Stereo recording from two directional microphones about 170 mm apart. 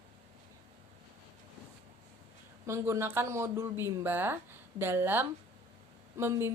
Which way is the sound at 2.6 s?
15° right (ahead or behind).